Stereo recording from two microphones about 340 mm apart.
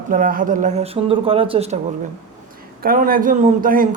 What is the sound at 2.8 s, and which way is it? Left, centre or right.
A man's voice, right.